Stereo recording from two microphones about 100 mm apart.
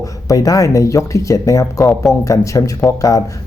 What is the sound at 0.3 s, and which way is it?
Speech, 35° left (ahead or behind).